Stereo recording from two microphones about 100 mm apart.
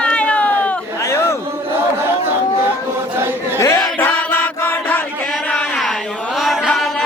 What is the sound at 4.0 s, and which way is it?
Music, 20° left (ahead or behind).